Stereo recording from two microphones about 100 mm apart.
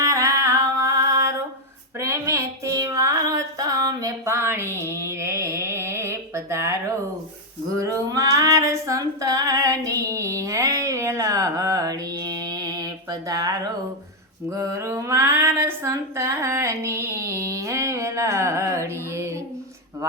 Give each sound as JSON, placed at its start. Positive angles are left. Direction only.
{"t": 0.0, "sound": "music", "side_deg": -30}
{"t": 2.0, "sound": "female singing", "side_deg": -30}
{"t": 4.4, "sound": "a sound", "side_deg": -25}
{"t": 7.8, "sound": "female singing", "side_deg": -35}
{"t": 9.8, "sound": "a sound", "side_deg": -30}
{"t": 14.5, "sound": "female singing", "side_deg": -30}
{"t": 15.9, "sound": "speech", "side_deg": -30}